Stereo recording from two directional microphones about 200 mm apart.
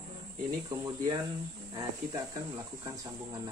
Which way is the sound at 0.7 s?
20° right (ahead or behind).